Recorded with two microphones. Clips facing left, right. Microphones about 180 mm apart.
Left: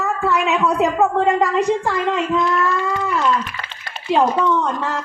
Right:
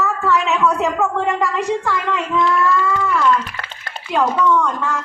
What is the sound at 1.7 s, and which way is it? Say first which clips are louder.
Speech: left 2 dB; 15° left (ahead or behind).